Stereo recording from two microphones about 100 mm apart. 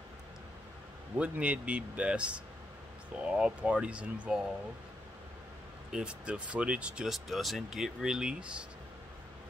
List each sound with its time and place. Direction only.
1.1 s speech: 15° right (ahead or behind)
5.9 s speech: 10° right (ahead or behind)